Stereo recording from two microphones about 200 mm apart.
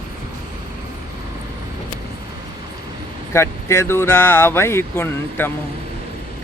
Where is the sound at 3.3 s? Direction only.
15° left (ahead or behind).